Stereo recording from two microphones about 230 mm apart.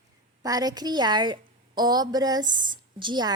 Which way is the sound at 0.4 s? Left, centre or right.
Centre.